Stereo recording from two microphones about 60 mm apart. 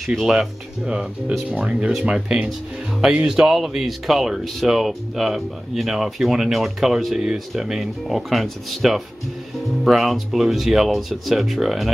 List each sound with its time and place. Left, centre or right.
0.0 s speech: centre
0.8 s speech: centre